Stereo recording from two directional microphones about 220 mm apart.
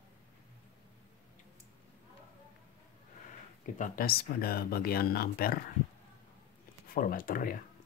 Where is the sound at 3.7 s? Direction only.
35° left (ahead or behind).